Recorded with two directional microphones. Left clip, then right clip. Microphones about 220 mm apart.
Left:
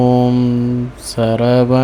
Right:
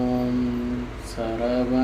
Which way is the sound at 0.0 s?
40° left (ahead or behind).